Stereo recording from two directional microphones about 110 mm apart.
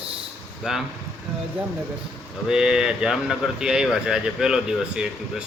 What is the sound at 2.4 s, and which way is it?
Speech, 5° right (ahead or behind).